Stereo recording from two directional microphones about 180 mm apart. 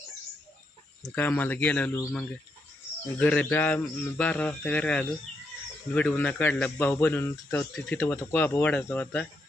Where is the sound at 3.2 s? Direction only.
10° left (ahead or behind).